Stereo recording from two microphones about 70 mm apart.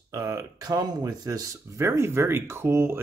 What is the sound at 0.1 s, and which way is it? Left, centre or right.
Speech, right.